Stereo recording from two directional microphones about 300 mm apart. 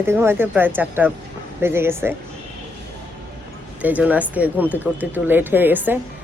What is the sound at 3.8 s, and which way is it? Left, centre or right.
Speech, centre.